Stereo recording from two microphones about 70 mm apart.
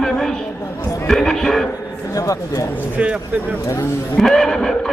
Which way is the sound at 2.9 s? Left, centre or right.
Right.